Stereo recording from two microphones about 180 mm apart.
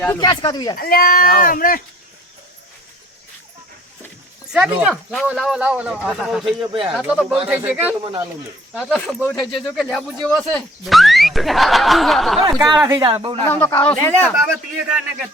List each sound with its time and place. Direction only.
0.2 s speech: 25° left (ahead or behind)
0.8 s speech: 55° left (ahead or behind)
4.5 s speech: 5° right (ahead or behind)
6.4 s speech: 30° right (ahead or behind)
7.0 s speech: 5° right (ahead or behind)
8.8 s speech: centre (ahead or behind)
12.4 s speech: 25° right (ahead or behind)
13.1 s speech: 30° right (ahead or behind)
13.5 s speech: 10° left (ahead or behind)